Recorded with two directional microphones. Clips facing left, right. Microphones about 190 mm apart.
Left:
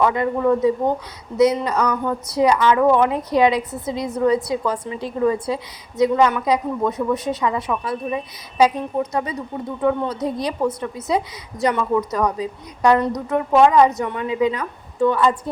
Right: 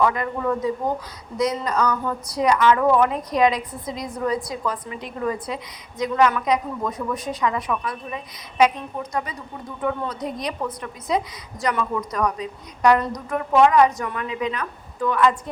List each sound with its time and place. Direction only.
0.0 s a woman's voice: 25° left (ahead or behind)
1.8 s speech: 15° left (ahead or behind)
2.3 s a woman's voice: 30° left (ahead or behind)
2.6 s a woman's voice: 20° left (ahead or behind)
10.2 s a woman's voice: 30° left (ahead or behind)